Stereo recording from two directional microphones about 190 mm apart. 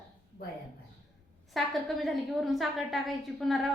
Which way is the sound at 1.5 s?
Centre (ahead or behind).